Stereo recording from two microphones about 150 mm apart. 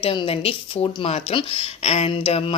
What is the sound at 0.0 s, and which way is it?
Speech, 35° left (ahead or behind).